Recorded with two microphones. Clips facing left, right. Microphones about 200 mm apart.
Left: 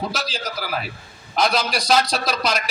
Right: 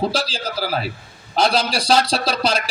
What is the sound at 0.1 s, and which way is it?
A man's voice, 30° right (ahead or behind).